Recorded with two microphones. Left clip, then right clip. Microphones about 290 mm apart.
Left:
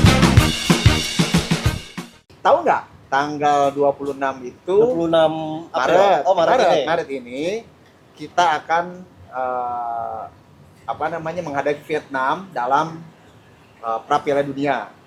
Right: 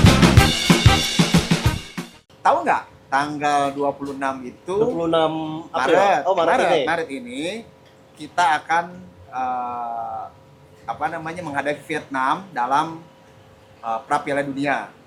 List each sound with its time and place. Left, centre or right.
0.0 s drum kit: centre
2.4 s speech: centre
4.9 s speech: right
5.7 s speech: left
6.2 s speech: right
6.5 s speech: centre
10.8 s speech: centre
13.8 s speech: centre